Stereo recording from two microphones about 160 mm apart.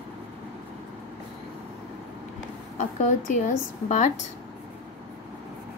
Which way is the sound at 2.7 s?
50° left (ahead or behind).